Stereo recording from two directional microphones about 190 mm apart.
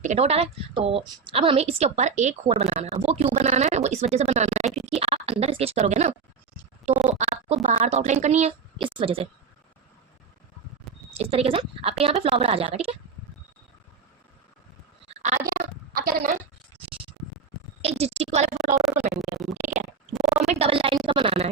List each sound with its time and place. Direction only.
0.0 s a woman's voice: 35° right (ahead or behind)
11.1 s a woman's voice: 30° right (ahead or behind)
15.2 s a sound: 40° right (ahead or behind)
18.0 s a woman's voice: 30° right (ahead or behind)
18.8 s a woman's voice: centre (ahead or behind)
20.5 s a woman's voice: 30° right (ahead or behind)